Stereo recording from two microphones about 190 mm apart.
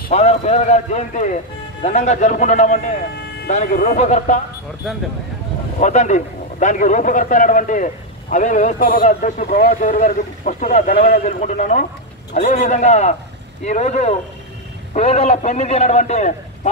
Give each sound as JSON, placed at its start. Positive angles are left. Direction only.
{"t": 0.1, "sound": "a man's voice", "side_deg": 35}
{"t": 4.8, "sound": "speech", "side_deg": 0}
{"t": 5.8, "sound": "a man's voice", "side_deg": 40}